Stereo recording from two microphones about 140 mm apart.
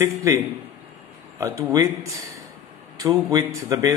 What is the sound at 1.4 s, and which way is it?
Speech, 25° right (ahead or behind).